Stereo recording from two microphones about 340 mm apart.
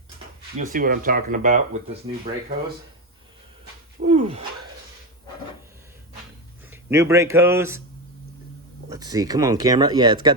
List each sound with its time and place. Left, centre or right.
0.6 s speech: right
4.0 s a sound: centre
6.7 s speech: centre
8.9 s speech: centre